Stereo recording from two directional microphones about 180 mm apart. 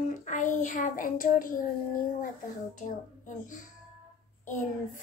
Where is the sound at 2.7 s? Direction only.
45° left (ahead or behind).